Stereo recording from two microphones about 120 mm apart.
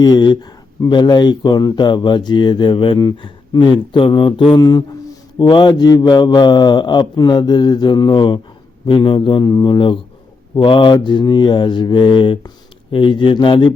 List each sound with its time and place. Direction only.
0.0 s speech: 35° left (ahead or behind)